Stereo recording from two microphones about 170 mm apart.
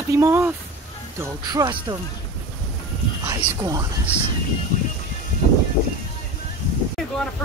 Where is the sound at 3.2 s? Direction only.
20° right (ahead or behind).